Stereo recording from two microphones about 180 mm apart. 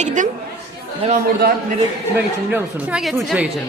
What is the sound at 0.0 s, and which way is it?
Chatter, 45° right (ahead or behind).